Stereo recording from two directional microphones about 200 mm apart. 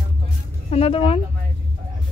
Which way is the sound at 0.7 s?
30° left (ahead or behind).